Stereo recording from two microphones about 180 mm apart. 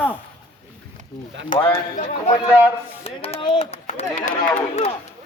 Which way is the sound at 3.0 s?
30° left (ahead or behind).